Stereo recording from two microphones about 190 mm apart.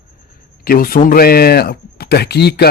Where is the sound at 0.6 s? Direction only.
50° left (ahead or behind).